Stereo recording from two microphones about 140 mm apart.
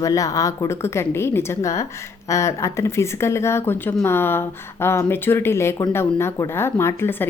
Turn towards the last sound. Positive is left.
turn(degrees=15)  # may be behind; listen again after turning